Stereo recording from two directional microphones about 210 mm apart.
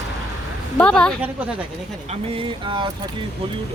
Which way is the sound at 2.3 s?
25° right (ahead or behind).